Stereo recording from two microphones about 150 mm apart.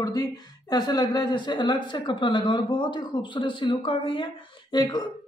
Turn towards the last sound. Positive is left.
turn(degrees=30)  # may be behind; listen again after turning